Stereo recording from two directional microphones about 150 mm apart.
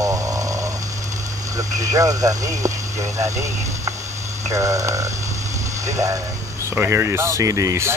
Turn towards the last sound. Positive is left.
turn(degrees=-20)  # may be behind; listen again after turning